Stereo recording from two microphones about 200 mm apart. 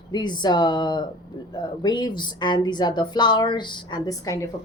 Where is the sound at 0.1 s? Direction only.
20° left (ahead or behind).